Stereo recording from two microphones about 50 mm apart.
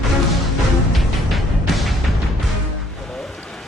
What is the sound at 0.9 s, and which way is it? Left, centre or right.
Music, centre.